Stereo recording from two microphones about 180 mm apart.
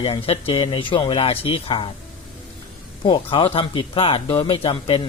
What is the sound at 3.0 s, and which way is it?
Speech, 30° left (ahead or behind).